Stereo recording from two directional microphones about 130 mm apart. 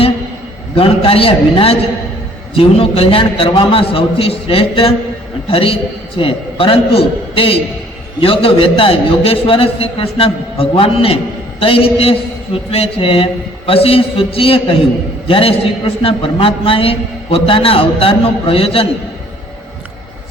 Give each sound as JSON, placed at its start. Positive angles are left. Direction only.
{"t": 0.8, "sound": "a man's voice", "side_deg": 45}